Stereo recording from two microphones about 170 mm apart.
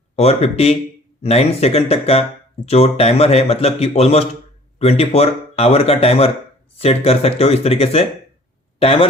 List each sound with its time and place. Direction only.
0.2 s speech: 35° left (ahead or behind)